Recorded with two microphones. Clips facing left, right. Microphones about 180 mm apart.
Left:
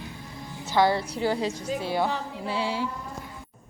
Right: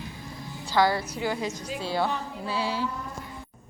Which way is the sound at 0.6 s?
20° left (ahead or behind).